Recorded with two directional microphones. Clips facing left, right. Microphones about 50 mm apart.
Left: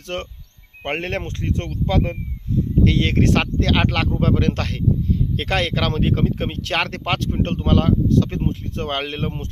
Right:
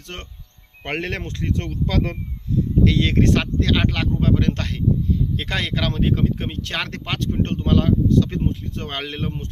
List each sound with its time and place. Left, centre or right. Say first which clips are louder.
0.1 s speech: left 10 dB; left
1.9 s speech: left 3 dB; left
3.0 s speech: even; left
5.4 s speech: left 3 dB; left